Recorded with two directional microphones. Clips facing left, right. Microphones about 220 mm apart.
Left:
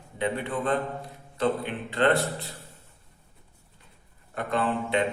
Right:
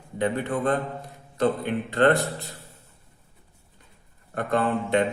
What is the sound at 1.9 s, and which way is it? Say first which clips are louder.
Speech: right 3 dB; 45° right (ahead or behind).